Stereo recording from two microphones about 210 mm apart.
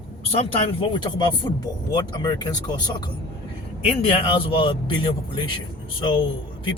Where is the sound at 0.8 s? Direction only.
20° left (ahead or behind).